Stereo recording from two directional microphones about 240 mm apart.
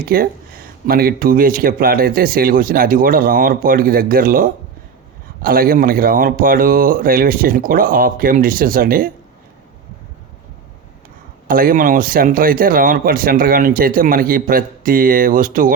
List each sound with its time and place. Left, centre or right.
0.0 s a man's voice: right
11.4 s a man's voice: right